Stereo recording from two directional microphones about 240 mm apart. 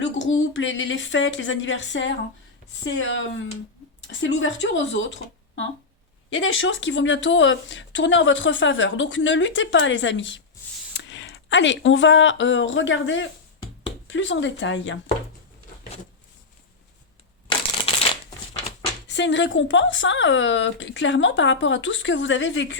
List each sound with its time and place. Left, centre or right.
0.0 s speech: left
6.3 s speech: left
19.0 s speech: left